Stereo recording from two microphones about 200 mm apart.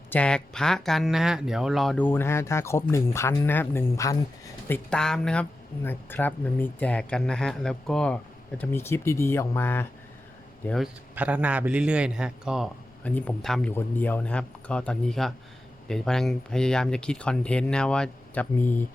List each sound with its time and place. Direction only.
0.1 s speech: 5° left (ahead or behind)
4.7 s speech: 5° left (ahead or behind)
11.1 s a man's voice: 10° right (ahead or behind)
13.1 s speech: 5° left (ahead or behind)